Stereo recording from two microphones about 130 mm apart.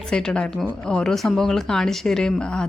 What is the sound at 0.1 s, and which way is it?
Speech, 5° left (ahead or behind).